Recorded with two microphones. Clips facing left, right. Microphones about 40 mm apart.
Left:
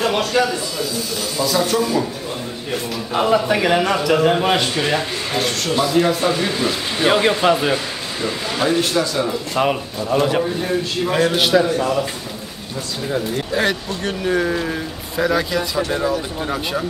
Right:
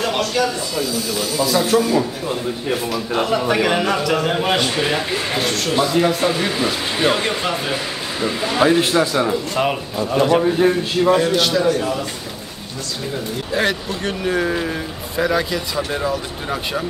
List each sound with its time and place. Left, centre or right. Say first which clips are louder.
0.3 s speech: left 2 dB; centre
1.3 s a man's voice: right 2 dB; centre
7.1 s speech: left 6 dB; centre
7.7 s speech: left 1 dB; centre
10.0 s a man's voice: right 2 dB; centre
11.3 s speech: left 2 dB; centre
11.6 s a man's voice: right 1 dB; centre
13.5 s a man's voice: right 2 dB; centre